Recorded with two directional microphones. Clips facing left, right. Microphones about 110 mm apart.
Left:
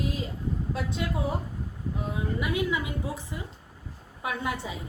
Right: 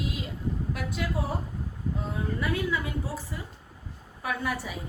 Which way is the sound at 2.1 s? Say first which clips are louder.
Left 1 dB; 15° left (ahead or behind).